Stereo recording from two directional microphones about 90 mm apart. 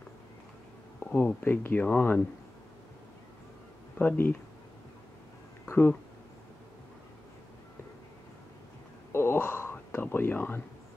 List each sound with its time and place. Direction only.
0.9 s speech: 25° left (ahead or behind)
4.0 s speech: 20° left (ahead or behind)
5.7 s speech: 25° left (ahead or behind)
9.1 s a sound: 25° left (ahead or behind)